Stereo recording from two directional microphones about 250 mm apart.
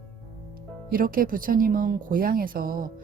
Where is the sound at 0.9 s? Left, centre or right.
Right.